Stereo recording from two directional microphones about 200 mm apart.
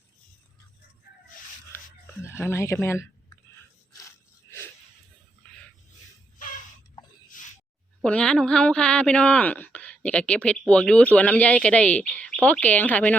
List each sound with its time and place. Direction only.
2.2 s speech: 10° left (ahead or behind)
7.3 s a sound: 40° left (ahead or behind)
8.0 s speech: 5° left (ahead or behind)